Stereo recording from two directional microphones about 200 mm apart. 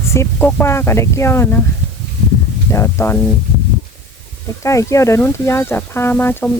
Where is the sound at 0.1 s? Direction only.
10° left (ahead or behind).